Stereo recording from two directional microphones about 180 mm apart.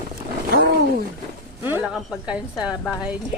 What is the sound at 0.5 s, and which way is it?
Wild animals, 60° right (ahead or behind).